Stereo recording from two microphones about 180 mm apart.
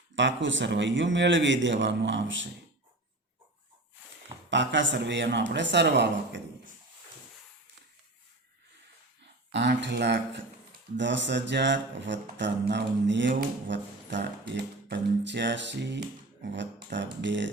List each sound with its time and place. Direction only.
0.2 s a man's voice: 90° right
4.4 s speech: 90° right; by 6.4 s 70° right (ahead or behind)
9.5 s speech: 75° right (ahead or behind)
10.9 s speech: 85° right